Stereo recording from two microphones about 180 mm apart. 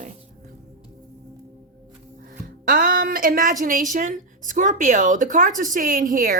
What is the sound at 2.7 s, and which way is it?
A woman's voice, 50° right (ahead or behind).